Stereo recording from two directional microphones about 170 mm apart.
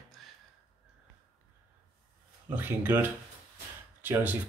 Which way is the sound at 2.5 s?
10° right (ahead or behind).